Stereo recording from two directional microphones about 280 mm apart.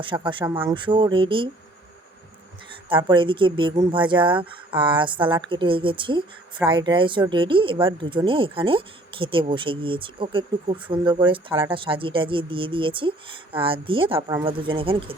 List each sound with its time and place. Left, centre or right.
0.0 s speech: centre
2.9 s speech: centre